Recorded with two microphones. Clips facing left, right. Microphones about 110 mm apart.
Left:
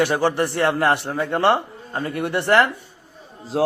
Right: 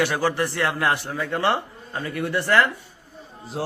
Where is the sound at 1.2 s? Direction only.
55° left (ahead or behind).